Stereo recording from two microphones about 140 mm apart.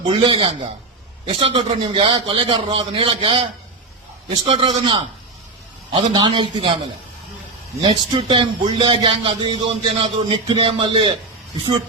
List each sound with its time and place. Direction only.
0.0 s speech: 35° right (ahead or behind)
7.8 s speech: 35° right (ahead or behind)